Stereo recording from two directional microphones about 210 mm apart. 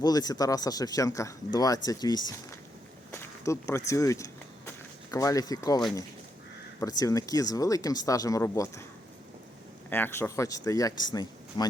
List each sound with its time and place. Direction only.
0.0 s speech: 20° left (ahead or behind)
3.1 s a sound: 15° left (ahead or behind)
5.1 s speech: 15° left (ahead or behind)
9.9 s speech: 10° left (ahead or behind)